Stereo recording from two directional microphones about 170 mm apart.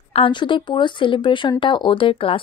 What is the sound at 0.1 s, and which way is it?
Speech, 30° left (ahead or behind).